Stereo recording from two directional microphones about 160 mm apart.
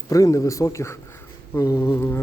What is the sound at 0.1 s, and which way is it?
Speech, 20° left (ahead or behind).